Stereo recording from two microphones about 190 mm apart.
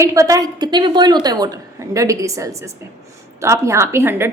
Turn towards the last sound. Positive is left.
turn(degrees=-15)  # may be behind; listen again after turning